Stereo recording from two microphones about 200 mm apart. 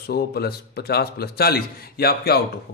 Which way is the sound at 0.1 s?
50° left (ahead or behind).